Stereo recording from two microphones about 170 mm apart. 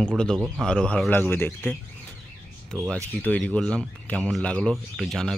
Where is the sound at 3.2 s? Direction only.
10° left (ahead or behind).